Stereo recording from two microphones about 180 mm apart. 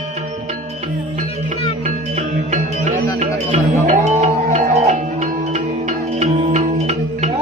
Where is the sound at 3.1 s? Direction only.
40° right (ahead or behind).